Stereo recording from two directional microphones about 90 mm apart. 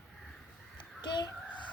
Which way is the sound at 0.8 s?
55° left (ahead or behind).